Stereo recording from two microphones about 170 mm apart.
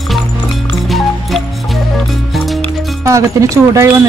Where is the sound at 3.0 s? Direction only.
20° right (ahead or behind).